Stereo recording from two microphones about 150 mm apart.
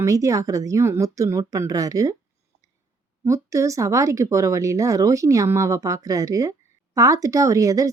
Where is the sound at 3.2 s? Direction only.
20° right (ahead or behind).